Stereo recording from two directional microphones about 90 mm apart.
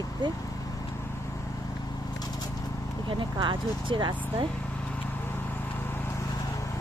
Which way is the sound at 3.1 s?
65° right (ahead or behind).